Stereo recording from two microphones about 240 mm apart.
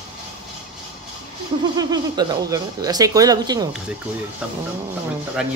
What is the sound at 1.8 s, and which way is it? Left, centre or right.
Speech, centre.